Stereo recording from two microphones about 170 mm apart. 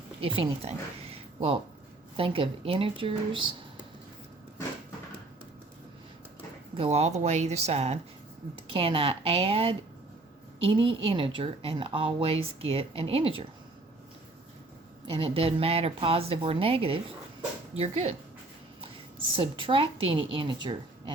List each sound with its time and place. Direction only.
0.2 s speech: 30° right (ahead or behind)
6.7 s speech: 40° right (ahead or behind)
15.1 s speech: 35° right (ahead or behind)
19.4 s a woman's voice: 30° right (ahead or behind)